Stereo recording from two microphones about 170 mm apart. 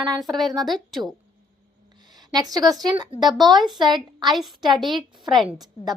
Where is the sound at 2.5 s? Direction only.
20° right (ahead or behind).